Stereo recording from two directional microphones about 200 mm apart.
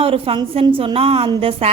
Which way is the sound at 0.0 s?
25° right (ahead or behind).